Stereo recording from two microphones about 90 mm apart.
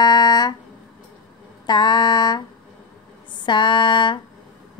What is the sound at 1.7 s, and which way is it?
Mantra, 55° left (ahead or behind).